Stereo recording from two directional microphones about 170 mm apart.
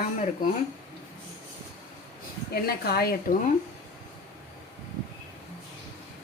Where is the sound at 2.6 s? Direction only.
65° left (ahead or behind).